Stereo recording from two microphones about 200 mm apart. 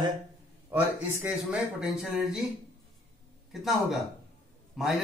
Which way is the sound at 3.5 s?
Centre (ahead or behind).